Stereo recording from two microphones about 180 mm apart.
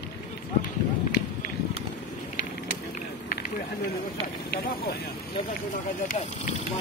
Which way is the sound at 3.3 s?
55° left (ahead or behind).